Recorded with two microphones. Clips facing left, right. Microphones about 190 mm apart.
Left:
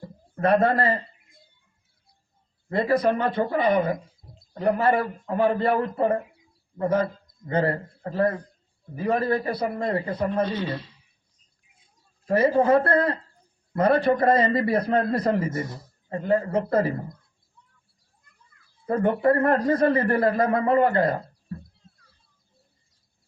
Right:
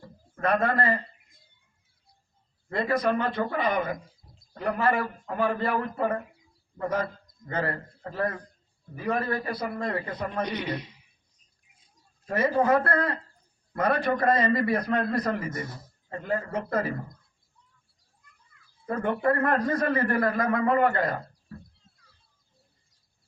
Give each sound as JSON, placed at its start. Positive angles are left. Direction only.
{"t": 0.3, "sound": "speech", "side_deg": 30}
{"t": 2.6, "sound": "a man's voice", "side_deg": 30}
{"t": 10.4, "sound": "speech", "side_deg": -15}
{"t": 12.2, "sound": "speech", "side_deg": 30}
{"t": 18.9, "sound": "speech", "side_deg": 30}